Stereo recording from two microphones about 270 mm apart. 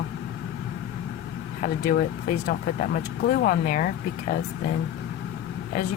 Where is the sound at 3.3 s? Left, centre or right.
Left.